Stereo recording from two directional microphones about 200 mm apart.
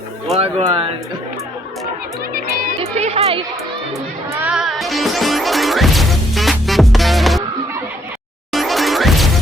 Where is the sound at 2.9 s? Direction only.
30° right (ahead or behind).